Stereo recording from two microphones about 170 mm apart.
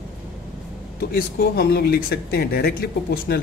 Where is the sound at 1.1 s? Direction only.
65° left (ahead or behind).